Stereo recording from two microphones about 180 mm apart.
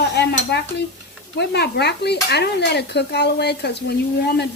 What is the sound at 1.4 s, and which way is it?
Dishes, 65° left (ahead or behind).